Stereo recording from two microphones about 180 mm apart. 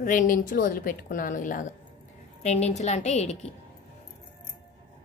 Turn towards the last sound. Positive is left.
turn(degrees=40)  # may be behind; listen again after turning